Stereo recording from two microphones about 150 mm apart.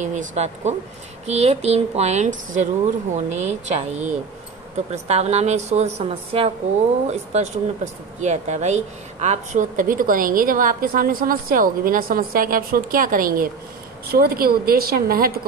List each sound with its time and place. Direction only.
0.0 s a woman's voice: 55° right (ahead or behind); by 15.4 s 75° right (ahead or behind)